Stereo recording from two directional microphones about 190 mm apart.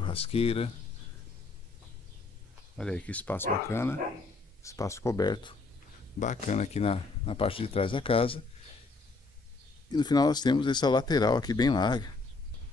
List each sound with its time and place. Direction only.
0.0 s speech: 30° left (ahead or behind)
2.8 s speech: 5° left (ahead or behind); by 5.5 s 20° left (ahead or behind)
6.1 s speech: 40° left (ahead or behind)
9.8 s speech: 20° left (ahead or behind)